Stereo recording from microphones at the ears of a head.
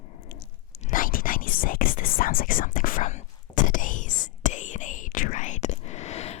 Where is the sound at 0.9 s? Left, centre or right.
Left.